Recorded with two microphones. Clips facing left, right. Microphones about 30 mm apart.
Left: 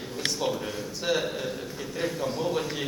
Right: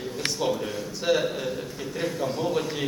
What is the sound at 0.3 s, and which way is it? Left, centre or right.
Speech, centre.